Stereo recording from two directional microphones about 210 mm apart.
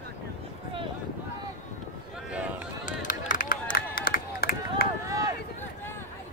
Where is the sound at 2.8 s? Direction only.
40° left (ahead or behind).